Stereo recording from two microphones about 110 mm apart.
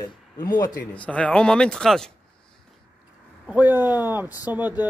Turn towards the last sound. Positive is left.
turn(degrees=-15)  # may be behind; listen again after turning